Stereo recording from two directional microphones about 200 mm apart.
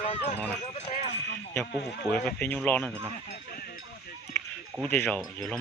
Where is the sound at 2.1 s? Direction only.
10° left (ahead or behind).